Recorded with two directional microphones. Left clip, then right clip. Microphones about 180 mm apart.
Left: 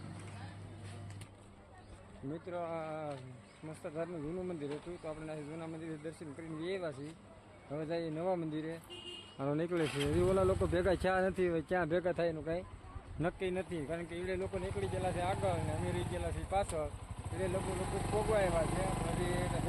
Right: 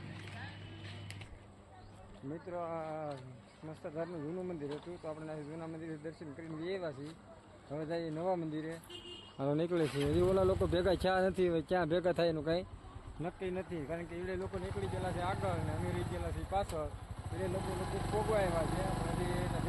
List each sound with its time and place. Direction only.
2.5 s a man's voice: 10° left (ahead or behind)
9.4 s a man's voice: 5° right (ahead or behind)
9.8 s speech: 10° left (ahead or behind)
10.1 s speech: 10° right (ahead or behind)
13.4 s speech: 20° left (ahead or behind)
13.8 s speech: 10° left (ahead or behind)